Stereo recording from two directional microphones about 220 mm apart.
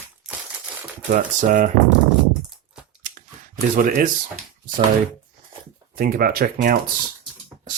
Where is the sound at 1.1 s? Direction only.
35° right (ahead or behind).